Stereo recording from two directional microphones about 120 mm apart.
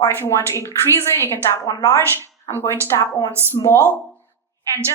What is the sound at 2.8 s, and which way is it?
Speech, 25° left (ahead or behind).